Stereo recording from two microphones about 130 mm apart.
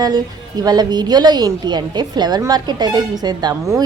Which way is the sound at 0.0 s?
30° right (ahead or behind).